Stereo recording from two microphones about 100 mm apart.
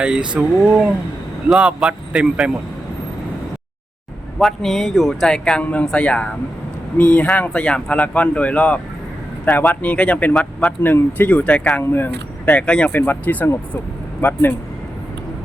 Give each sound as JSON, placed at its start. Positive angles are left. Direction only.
{"t": 0.0, "sound": "speech", "side_deg": -10}
{"t": 4.4, "sound": "speech", "side_deg": 0}
{"t": 11.8, "sound": "speech", "side_deg": 20}